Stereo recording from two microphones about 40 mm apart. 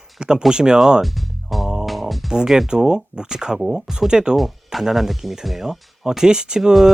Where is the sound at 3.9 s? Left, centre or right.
Centre.